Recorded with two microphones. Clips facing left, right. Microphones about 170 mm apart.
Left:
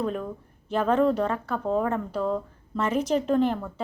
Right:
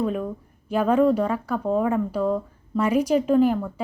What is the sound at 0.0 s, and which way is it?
Speech, 5° right (ahead or behind).